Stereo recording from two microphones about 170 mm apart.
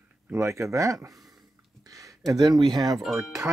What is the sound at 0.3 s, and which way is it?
Speech, 15° right (ahead or behind).